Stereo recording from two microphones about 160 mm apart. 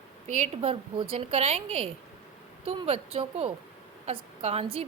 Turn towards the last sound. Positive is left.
turn(degrees=-40)  # may be behind; listen again after turning